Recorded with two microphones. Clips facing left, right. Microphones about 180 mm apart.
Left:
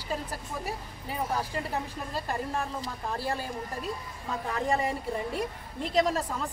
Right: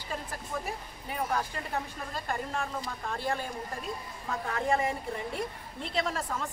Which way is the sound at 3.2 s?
35° left (ahead or behind).